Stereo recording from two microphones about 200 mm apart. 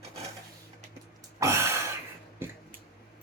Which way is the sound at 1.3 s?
15° right (ahead or behind).